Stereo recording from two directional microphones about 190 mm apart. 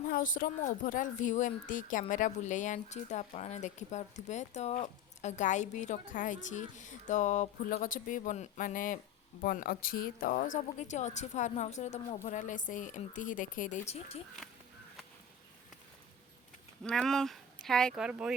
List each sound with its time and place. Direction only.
0.1 s speech: 45° left (ahead or behind)
16.8 s speech: centre (ahead or behind)